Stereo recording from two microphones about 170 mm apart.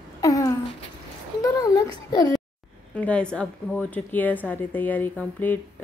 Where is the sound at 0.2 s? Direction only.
20° left (ahead or behind).